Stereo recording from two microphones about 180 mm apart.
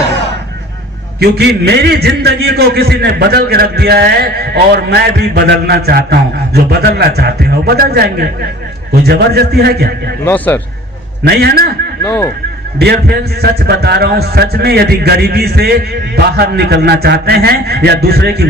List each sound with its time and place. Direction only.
1.2 s a man's voice: 65° right (ahead or behind)
10.2 s a man's voice: 10° left (ahead or behind)
11.3 s a man's voice: 60° right (ahead or behind)
12.0 s a man's voice: 15° left (ahead or behind)
12.8 s a man's voice: 60° right (ahead or behind)